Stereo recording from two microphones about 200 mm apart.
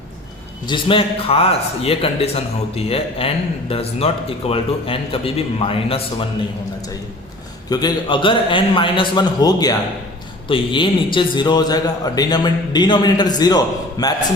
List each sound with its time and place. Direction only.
0.6 s a man's voice: 25° left (ahead or behind)
7.7 s a man's voice: 20° left (ahead or behind)